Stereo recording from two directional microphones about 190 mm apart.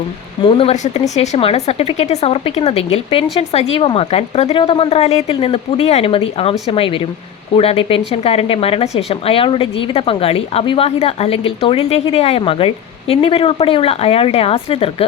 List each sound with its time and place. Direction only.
0.4 s speech: 30° left (ahead or behind)